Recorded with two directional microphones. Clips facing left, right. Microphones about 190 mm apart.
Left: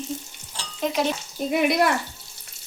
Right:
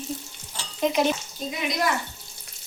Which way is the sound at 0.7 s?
Centre (ahead or behind).